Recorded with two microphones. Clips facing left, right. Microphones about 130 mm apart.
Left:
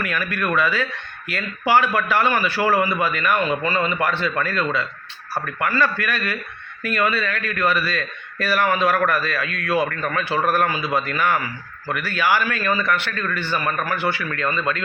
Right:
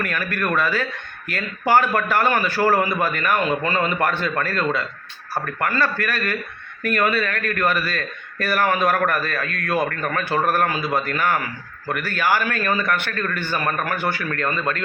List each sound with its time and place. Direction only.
0.0 s a man's voice: 45° right (ahead or behind)